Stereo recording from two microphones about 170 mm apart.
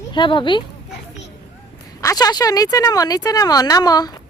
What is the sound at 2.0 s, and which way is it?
Speech, 20° left (ahead or behind).